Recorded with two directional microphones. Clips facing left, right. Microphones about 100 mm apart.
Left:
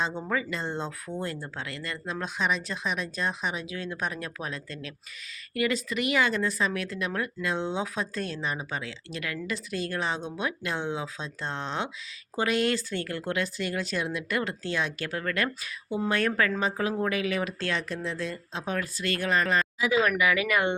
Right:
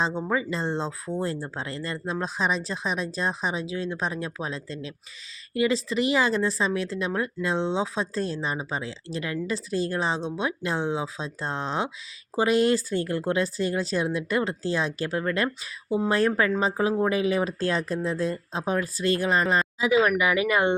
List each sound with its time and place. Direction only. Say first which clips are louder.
0.0 s speech: right 3 dB; 30° right (ahead or behind)